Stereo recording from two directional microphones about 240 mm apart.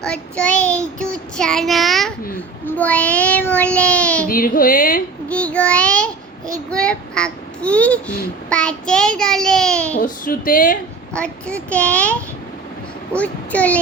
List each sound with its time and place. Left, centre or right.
0.0 s child singing: centre
4.3 s speech: left
5.3 s child singing: centre
10.0 s speech: left
11.1 s child singing: centre
13.1 s child singing: centre